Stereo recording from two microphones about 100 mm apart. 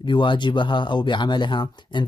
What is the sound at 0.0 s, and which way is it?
Speech, 55° left (ahead or behind).